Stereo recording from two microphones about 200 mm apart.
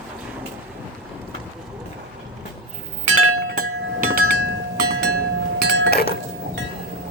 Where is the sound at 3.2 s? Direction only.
90° right.